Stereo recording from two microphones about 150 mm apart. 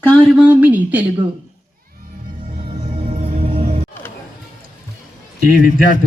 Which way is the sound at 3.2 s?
45° right (ahead or behind).